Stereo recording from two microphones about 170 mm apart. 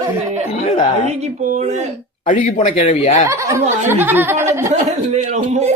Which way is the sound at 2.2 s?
45° left (ahead or behind).